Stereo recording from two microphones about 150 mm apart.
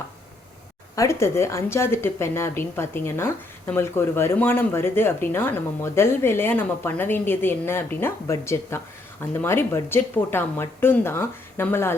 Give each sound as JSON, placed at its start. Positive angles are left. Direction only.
{"t": 0.9, "sound": "a woman's voice", "side_deg": 20}